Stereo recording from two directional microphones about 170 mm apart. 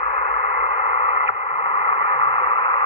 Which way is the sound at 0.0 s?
40° left (ahead or behind).